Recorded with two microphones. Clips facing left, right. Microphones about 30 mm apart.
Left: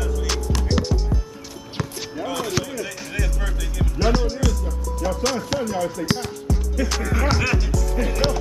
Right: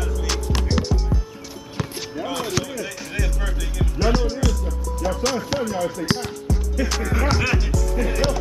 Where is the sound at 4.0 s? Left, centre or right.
Centre.